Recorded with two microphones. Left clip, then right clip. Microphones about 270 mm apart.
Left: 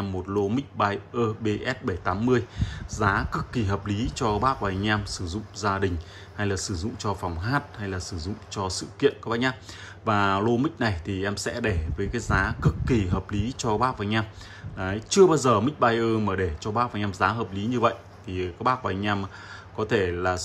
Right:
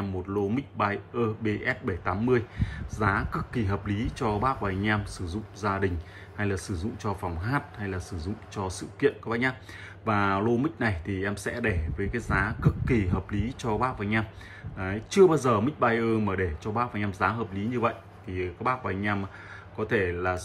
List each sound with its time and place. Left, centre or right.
0.0 s a man's voice: centre